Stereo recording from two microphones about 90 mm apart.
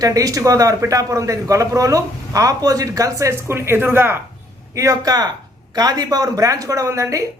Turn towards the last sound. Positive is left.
turn(degrees=-35)  # may be behind; listen again after turning